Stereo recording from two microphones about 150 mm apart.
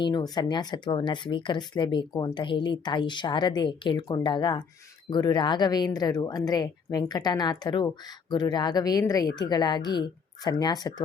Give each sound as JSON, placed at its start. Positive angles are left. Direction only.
{"t": 0.0, "sound": "a woman's voice", "side_deg": 30}